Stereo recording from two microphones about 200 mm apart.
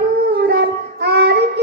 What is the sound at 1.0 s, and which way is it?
Child singing, 55° right (ahead or behind).